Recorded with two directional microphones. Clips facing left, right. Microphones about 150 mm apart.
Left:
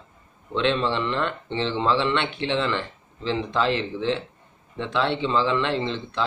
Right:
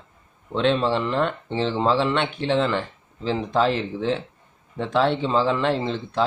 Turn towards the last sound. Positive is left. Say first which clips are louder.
# right 2 dB
turn(degrees=-45)  # may be behind; listen again after turning